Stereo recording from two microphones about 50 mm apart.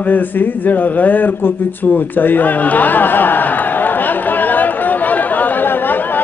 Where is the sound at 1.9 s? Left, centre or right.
Left.